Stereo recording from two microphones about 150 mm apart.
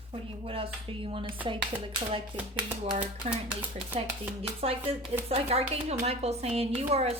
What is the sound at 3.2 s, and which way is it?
A woman's voice, 45° right (ahead or behind).